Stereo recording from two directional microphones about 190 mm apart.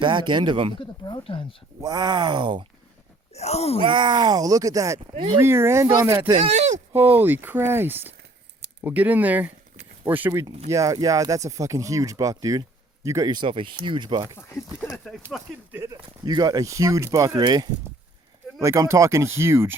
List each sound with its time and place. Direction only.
0.0 s speech: 25° right (ahead or behind)
0.8 s speech: 25° left (ahead or behind)
1.8 s speech: 20° right (ahead or behind)
3.3 s speech: 35° left (ahead or behind)
3.8 s speech: 25° right (ahead or behind)
5.4 s speech: 15° right (ahead or behind)
6.3 s speech: 35° right (ahead or behind)
6.9 s speech: 10° right (ahead or behind)
14.3 s speech: 15° left (ahead or behind)
15.7 s speech: 15° right (ahead or behind)